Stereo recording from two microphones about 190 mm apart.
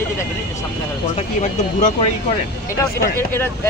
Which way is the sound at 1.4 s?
40° left (ahead or behind).